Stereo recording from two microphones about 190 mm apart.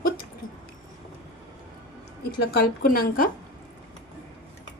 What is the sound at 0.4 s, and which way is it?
Squish, 90° left.